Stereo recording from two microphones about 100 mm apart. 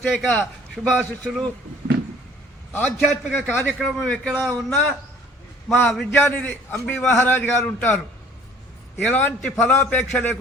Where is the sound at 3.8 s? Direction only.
5° left (ahead or behind).